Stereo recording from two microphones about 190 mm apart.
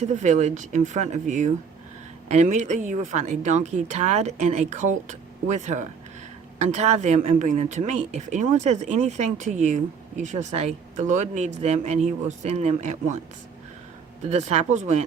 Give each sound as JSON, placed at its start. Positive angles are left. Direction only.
{"t": 0.0, "sound": "a woman's voice", "side_deg": -40}
{"t": 14.3, "sound": "a woman's voice", "side_deg": -35}